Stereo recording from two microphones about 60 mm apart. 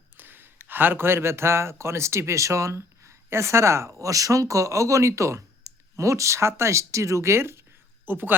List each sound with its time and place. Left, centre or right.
0.2 s speech: right
8.0 s speech: right